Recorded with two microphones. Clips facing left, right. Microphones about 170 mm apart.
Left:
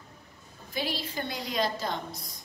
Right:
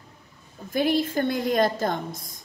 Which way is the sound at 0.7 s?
50° right (ahead or behind).